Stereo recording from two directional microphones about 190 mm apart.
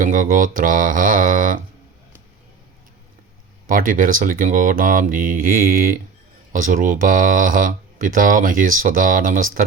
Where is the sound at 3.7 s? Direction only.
45° right (ahead or behind).